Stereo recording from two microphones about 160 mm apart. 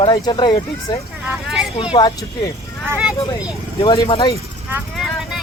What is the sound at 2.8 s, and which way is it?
Speech, 5° right (ahead or behind).